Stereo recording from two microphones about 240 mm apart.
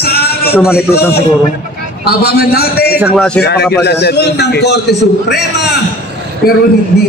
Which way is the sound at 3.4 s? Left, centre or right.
Left.